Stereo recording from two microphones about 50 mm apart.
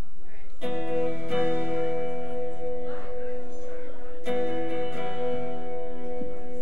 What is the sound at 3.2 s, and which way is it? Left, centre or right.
Music, left.